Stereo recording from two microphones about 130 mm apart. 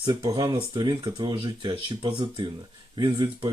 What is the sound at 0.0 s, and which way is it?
Speech, 35° right (ahead or behind).